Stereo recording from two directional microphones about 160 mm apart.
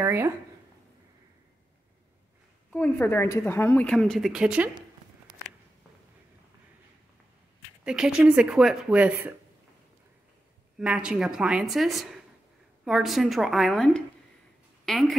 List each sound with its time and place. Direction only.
0.0 s speech: 15° right (ahead or behind)
2.7 s a woman's voice: 10° left (ahead or behind); by 4.6 s 5° right (ahead or behind)
7.8 s speech: 5° right (ahead or behind)
10.8 s speech: 5° right (ahead or behind)